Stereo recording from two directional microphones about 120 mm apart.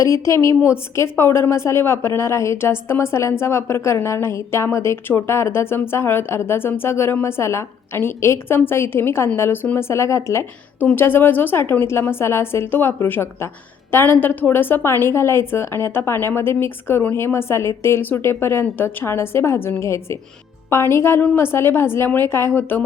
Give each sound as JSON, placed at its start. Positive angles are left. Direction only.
{"t": 0.0, "sound": "a woman's voice", "side_deg": 25}